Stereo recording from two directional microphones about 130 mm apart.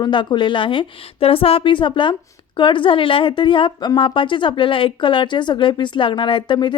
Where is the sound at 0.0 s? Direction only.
35° left (ahead or behind).